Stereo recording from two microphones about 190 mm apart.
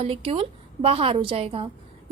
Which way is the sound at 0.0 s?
30° right (ahead or behind).